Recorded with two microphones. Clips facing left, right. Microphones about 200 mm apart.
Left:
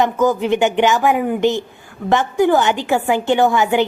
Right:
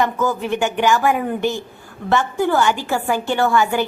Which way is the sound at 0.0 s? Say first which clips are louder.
Left 4 dB; 20° left (ahead or behind).